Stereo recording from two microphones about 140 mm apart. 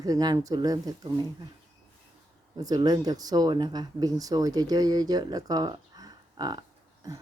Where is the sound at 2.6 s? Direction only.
25° right (ahead or behind).